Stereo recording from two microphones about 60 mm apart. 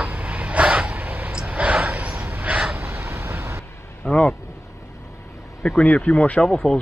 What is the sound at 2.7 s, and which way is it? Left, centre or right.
Vehicle, right.